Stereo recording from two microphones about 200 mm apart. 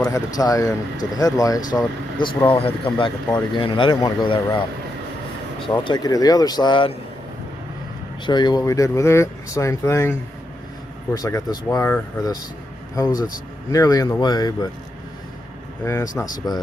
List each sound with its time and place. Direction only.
0.3 s speech: 20° left (ahead or behind)
5.8 s speech: 20° left (ahead or behind)
8.3 s speech: 20° left (ahead or behind)
15.8 s speech: 15° left (ahead or behind)